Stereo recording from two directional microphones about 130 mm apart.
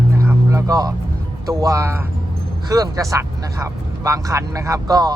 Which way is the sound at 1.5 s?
25° right (ahead or behind).